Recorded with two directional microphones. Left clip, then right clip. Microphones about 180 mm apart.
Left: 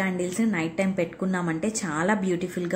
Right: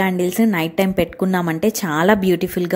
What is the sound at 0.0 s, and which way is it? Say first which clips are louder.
A woman's voice: right 9 dB; 45° right (ahead or behind).